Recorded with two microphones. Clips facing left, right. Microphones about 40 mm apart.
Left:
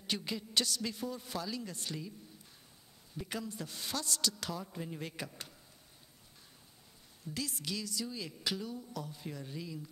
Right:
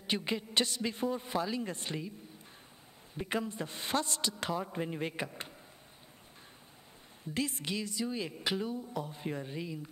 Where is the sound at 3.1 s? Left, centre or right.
Right.